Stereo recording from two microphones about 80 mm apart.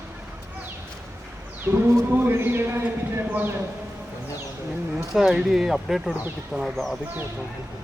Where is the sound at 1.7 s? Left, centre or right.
Right.